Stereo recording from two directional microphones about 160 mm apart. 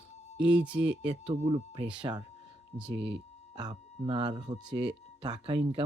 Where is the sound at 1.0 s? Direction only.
35° right (ahead or behind).